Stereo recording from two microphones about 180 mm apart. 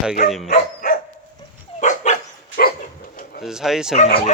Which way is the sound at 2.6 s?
55° left (ahead or behind).